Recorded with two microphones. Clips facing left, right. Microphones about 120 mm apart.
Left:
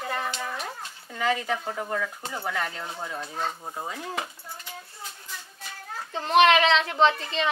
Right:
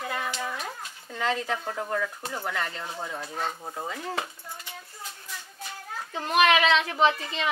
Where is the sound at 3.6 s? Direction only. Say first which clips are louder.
Even; 15° left (ahead or behind).